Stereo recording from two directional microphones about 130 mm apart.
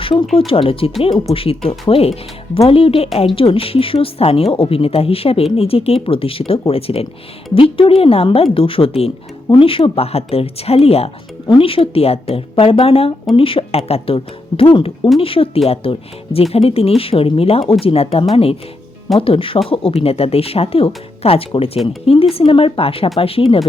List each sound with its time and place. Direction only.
0.0 s speech: 45° left (ahead or behind)